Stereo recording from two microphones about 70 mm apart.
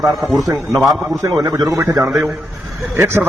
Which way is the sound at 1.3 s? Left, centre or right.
Right.